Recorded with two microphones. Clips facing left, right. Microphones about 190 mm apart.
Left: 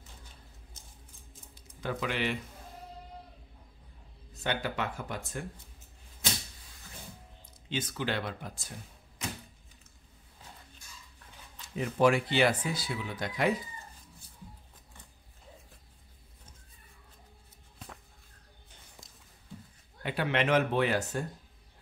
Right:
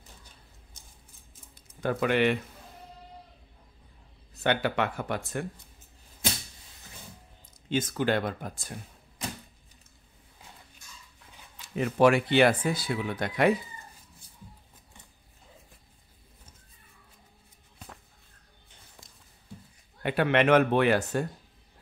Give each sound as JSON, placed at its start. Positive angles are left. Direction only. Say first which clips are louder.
{"t": 1.8, "sound": "speech", "louder": "right 8 dB", "side_deg": -55}
{"t": 4.4, "sound": "speech", "louder": "right 6 dB", "side_deg": -65}
{"t": 7.7, "sound": "speech", "louder": "right 7 dB", "side_deg": -45}
{"t": 11.7, "sound": "speech", "louder": "right 4 dB", "side_deg": -65}
{"t": 20.0, "sound": "speech", "louder": "right 6 dB", "side_deg": -60}